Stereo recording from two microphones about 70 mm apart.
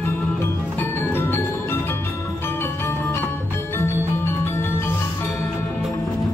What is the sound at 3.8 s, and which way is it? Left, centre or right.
Music, left.